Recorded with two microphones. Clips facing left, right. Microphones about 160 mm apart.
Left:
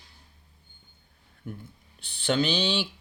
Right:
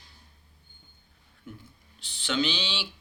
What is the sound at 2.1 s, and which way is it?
Speech, 50° left (ahead or behind).